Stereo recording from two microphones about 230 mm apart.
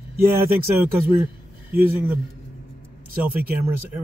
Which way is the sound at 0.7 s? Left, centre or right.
Centre.